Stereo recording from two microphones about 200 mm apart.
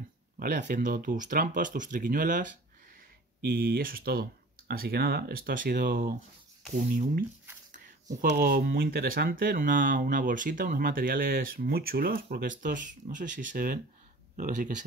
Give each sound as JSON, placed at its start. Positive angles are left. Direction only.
{"t": 0.4, "sound": "speech", "side_deg": -40}